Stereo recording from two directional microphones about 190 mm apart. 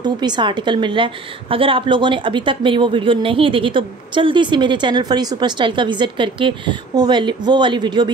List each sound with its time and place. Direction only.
0.0 s a woman's voice: 25° right (ahead or behind)